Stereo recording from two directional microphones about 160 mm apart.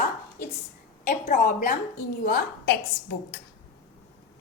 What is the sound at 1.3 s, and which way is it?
Speech, 50° left (ahead or behind).